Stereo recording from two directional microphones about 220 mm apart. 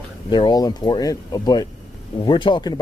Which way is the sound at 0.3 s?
20° left (ahead or behind).